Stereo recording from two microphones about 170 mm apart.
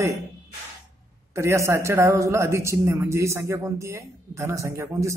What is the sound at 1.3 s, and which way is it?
A man's voice, 15° right (ahead or behind).